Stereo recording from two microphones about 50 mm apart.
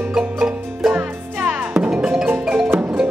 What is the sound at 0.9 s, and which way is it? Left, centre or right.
Music, right.